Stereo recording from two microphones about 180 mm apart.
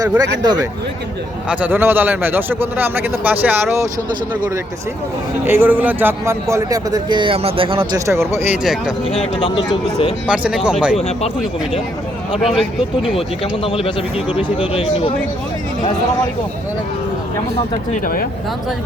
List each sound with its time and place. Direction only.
0.2 s a man's voice: 20° right (ahead or behind)
1.5 s a man's voice: 10° right (ahead or behind)
5.5 s a man's voice: 10° right (ahead or behind); by 7.9 s 30° right (ahead or behind)
7.9 s a man's voice: 15° right (ahead or behind)
9.0 s a man's voice: 30° left (ahead or behind)
10.2 s speech: 5° right (ahead or behind)
12.5 s speech: centre (ahead or behind)
13.1 s a man's voice: 30° left (ahead or behind)
18.0 s speech: 55° left (ahead or behind)